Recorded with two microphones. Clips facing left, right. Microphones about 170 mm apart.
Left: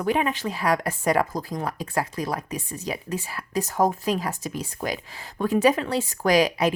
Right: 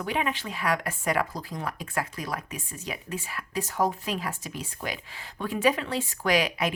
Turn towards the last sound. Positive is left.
turn(degrees=40)  # may be behind; listen again after turning